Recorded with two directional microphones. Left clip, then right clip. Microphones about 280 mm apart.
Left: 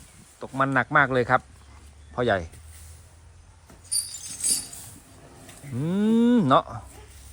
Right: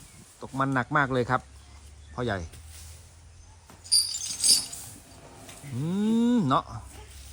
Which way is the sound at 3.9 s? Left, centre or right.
Centre.